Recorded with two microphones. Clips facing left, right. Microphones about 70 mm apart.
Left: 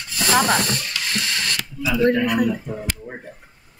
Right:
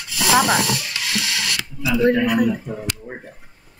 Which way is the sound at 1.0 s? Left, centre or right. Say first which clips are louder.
Right 1 dB; right.